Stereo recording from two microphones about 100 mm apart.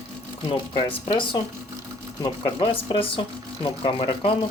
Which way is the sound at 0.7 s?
55° left (ahead or behind).